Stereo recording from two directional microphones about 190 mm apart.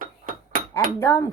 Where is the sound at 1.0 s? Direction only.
15° left (ahead or behind).